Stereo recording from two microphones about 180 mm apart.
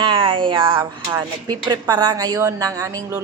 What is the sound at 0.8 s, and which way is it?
A woman's voice, 15° right (ahead or behind).